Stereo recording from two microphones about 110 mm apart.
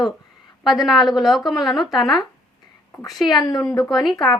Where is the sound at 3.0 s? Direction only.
40° left (ahead or behind).